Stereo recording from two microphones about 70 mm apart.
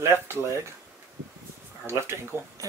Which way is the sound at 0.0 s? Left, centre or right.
Right.